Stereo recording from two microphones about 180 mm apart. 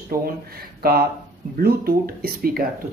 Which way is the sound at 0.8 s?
55° right (ahead or behind).